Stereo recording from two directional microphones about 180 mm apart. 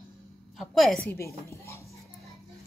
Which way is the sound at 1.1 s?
15° left (ahead or behind).